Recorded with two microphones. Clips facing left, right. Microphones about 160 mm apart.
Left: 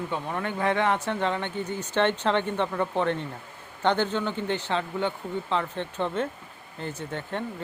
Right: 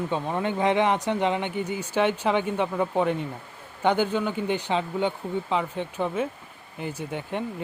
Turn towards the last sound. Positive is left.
turn(degrees=-10)  # may be behind; listen again after turning